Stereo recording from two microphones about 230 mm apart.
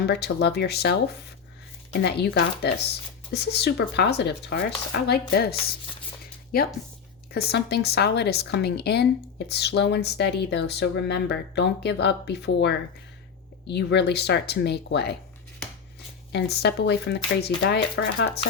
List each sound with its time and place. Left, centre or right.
0.0 s speech: left
7.3 s speech: left
16.3 s speech: left